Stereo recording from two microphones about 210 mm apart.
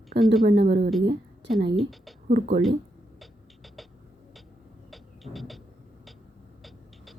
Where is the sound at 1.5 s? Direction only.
25° right (ahead or behind).